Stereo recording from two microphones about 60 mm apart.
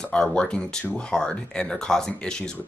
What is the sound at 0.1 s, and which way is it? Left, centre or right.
Speech, centre.